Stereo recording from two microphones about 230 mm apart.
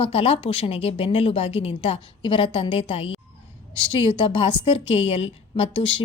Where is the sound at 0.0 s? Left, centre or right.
Left.